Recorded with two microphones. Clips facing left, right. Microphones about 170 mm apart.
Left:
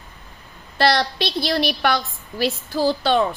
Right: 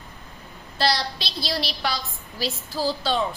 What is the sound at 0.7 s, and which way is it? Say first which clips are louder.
A woman's voice: left 6 dB; 60° left (ahead or behind).